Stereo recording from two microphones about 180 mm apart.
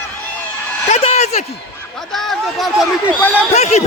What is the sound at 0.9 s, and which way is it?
Speech, 35° left (ahead or behind).